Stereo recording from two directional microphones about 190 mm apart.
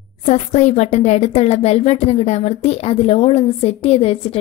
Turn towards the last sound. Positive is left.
turn(degrees=30)  # may be behind; listen again after turning